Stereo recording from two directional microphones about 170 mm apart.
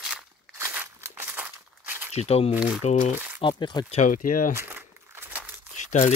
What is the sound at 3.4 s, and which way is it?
Speech, 25° left (ahead or behind).